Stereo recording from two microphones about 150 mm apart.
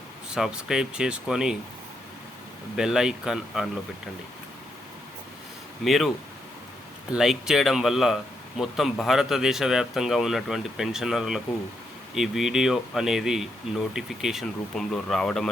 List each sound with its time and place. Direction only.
0.3 s speech: 5° right (ahead or behind)
2.7 s speech: 5° right (ahead or behind)
5.8 s speech: centre (ahead or behind)
7.1 s speech: 5° right (ahead or behind)